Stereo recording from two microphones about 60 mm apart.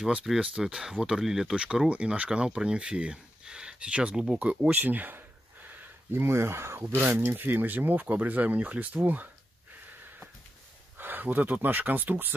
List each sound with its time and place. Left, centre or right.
0.0 s speech: centre
4.6 s speech: right
6.1 s speech: right
11.0 s speech: right